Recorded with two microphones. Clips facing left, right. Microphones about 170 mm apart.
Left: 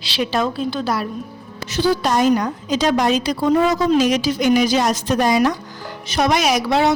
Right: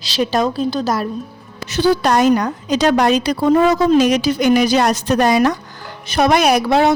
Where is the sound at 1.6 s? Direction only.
65° right (ahead or behind).